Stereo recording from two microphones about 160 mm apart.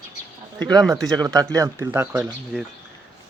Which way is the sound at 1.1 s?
25° right (ahead or behind).